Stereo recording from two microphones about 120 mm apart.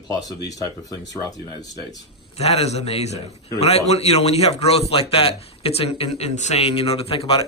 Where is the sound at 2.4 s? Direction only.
60° left (ahead or behind).